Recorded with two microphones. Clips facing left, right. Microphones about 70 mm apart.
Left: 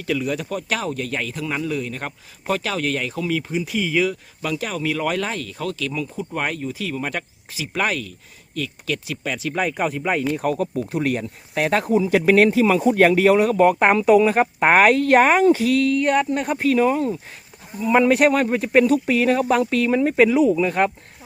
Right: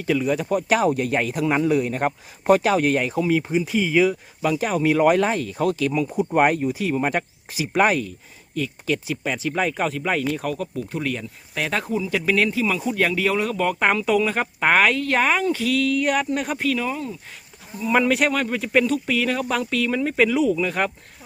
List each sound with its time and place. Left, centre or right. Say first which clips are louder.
0.0 s speech: right 2 dB; centre
3.5 s speech: right 2 dB; centre
9.6 s speech: left 2 dB; centre
10.4 s speech: left 5 dB; left
11.5 s speech: left 6 dB; left
14.8 s speech: left 8 dB; left
16.0 s speech: left 3 dB; centre
16.6 s speech: left 6 dB; left
17.7 s speech: left 3 dB; centre
18.3 s speech: left 5 dB; left